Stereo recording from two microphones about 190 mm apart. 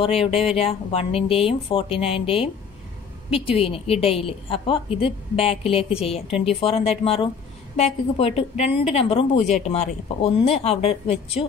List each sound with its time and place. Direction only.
0.0 s a woman's voice: 30° left (ahead or behind)